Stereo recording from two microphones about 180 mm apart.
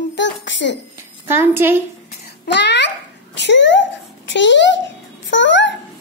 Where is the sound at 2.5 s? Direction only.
75° left (ahead or behind); by 5.7 s 90° left.